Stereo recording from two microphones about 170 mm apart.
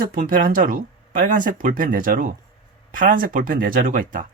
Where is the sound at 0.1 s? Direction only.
55° right (ahead or behind).